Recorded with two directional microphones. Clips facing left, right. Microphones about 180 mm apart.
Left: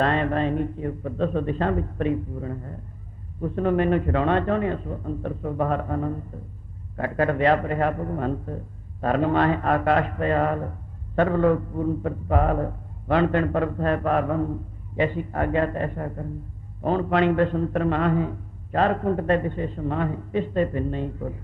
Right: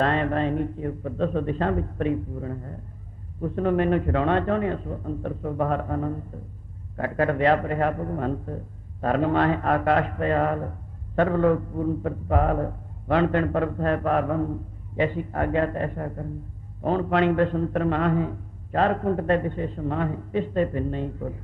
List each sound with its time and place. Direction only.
0.0 s a man's voice: 35° right (ahead or behind)